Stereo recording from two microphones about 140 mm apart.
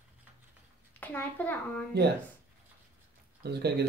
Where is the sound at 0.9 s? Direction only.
10° left (ahead or behind).